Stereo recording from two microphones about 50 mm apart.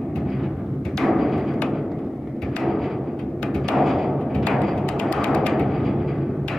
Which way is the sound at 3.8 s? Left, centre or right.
Centre.